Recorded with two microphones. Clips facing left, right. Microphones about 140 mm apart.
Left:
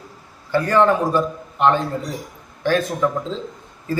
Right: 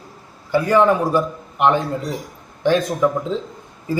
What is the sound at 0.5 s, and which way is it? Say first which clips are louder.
A man's voice: right 1 dB; 10° right (ahead or behind).